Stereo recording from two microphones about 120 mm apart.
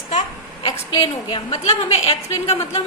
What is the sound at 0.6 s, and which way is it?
A woman's voice, 45° left (ahead or behind).